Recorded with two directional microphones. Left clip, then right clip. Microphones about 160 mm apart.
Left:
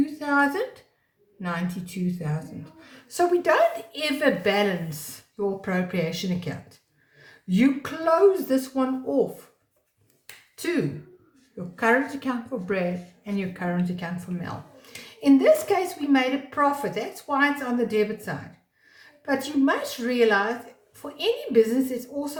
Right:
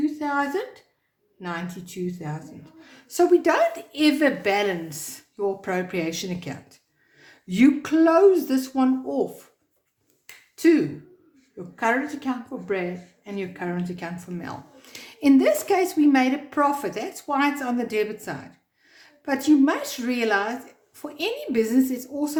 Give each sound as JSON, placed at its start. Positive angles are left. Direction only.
{"t": 0.2, "sound": "a woman's voice", "side_deg": -35}
{"t": 10.6, "sound": "a woman's voice", "side_deg": -40}